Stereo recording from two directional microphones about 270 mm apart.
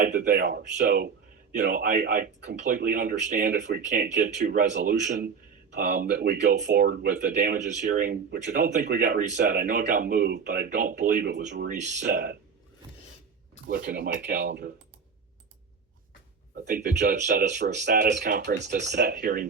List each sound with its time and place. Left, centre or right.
0.0 s speech: right
13.7 s speech: right
16.7 s speech: right